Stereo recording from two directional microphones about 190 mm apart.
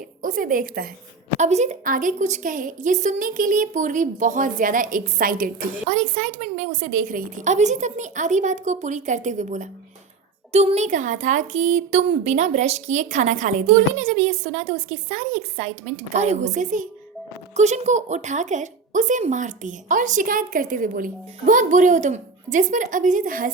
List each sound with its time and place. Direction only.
0.2 s a woman's voice: 45° right (ahead or behind)
1.4 s a woman's voice: 35° right (ahead or behind)